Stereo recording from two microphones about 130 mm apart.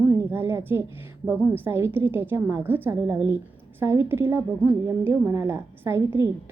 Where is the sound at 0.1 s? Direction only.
20° right (ahead or behind).